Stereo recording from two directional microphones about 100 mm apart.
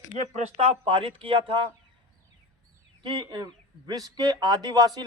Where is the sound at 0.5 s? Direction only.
90° right; by 1.6 s 60° right (ahead or behind).